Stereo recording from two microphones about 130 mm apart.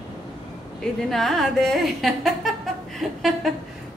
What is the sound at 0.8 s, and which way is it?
A woman's voice, 5° left (ahead or behind).